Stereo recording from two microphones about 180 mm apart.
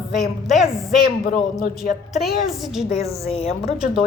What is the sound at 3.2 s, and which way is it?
Speech, 35° left (ahead or behind).